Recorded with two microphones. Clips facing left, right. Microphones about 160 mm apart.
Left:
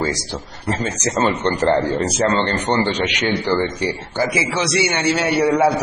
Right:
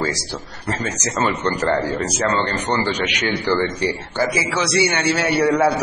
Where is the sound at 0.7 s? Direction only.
25° left (ahead or behind).